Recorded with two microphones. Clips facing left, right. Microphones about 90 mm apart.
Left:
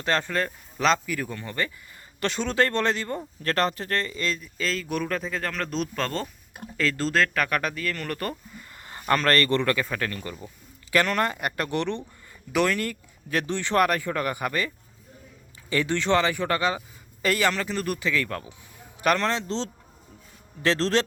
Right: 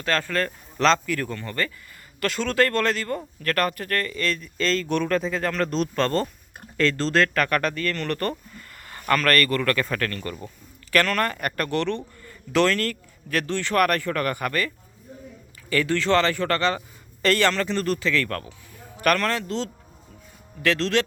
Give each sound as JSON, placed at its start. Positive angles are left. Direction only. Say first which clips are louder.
{"t": 0.0, "sound": "speech", "louder": "right 1 dB", "side_deg": 20}
{"t": 8.8, "sound": "speech", "louder": "right 1 dB", "side_deg": 20}
{"t": 9.7, "sound": "speech", "louder": "right 2 dB", "side_deg": 10}
{"t": 15.7, "sound": "a man's voice", "louder": "right 2 dB", "side_deg": 20}